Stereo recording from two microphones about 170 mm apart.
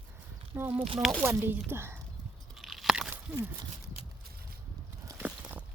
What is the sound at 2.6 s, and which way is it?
Crunch, centre (ahead or behind).